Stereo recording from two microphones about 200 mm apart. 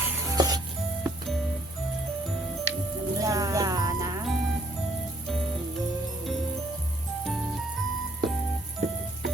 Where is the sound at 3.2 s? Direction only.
15° right (ahead or behind).